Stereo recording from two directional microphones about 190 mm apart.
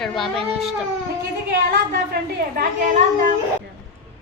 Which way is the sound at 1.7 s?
50° right (ahead or behind).